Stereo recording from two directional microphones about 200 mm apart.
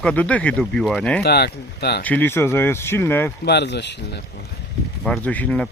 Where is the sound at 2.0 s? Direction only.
10° left (ahead or behind).